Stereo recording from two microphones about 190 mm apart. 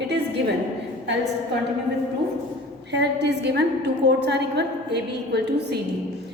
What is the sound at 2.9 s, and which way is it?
A woman's voice, 65° right (ahead or behind).